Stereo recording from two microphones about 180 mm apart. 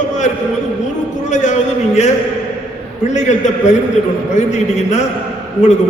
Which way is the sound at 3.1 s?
40° left (ahead or behind).